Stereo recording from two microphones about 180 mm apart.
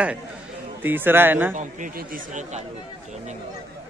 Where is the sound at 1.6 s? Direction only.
45° right (ahead or behind).